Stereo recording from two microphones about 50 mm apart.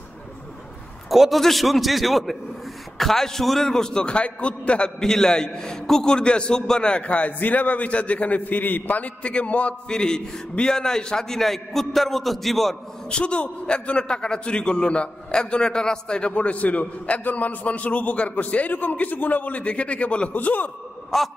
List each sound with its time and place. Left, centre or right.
1.1 s a man's voice: centre; by 4.9 s left
5.0 s a man's voice: centre; by 9.8 s left
9.8 s a man's voice: centre
13.1 s a man's voice: left
21.1 s a man's voice: centre